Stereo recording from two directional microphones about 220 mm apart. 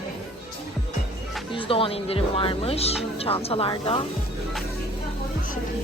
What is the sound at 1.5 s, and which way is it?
Speech, 25° left (ahead or behind).